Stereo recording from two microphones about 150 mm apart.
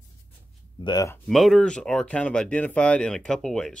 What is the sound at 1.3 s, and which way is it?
Speech, centre (ahead or behind).